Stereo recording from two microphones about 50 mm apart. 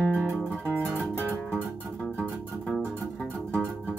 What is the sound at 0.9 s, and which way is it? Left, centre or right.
Music, right.